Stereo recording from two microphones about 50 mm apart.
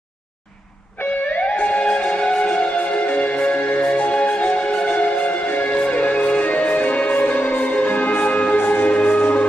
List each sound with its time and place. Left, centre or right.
1.3 s music: left